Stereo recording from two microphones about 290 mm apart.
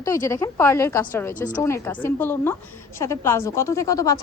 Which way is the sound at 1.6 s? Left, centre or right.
Centre.